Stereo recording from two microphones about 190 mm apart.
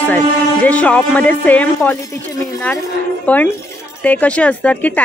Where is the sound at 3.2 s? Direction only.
10° left (ahead or behind).